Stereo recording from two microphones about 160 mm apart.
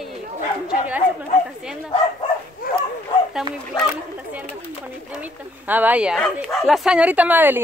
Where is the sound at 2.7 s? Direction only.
65° left (ahead or behind).